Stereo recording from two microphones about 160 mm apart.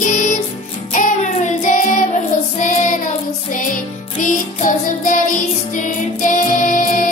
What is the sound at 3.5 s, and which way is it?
Music, 55° left (ahead or behind).